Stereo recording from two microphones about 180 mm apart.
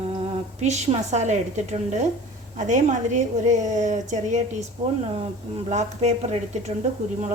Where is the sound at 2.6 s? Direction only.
40° right (ahead or behind).